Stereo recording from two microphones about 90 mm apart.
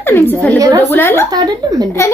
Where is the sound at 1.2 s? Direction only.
45° right (ahead or behind).